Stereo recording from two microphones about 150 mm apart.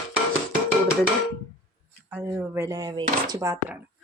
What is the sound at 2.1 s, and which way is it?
Speech, 15° right (ahead or behind).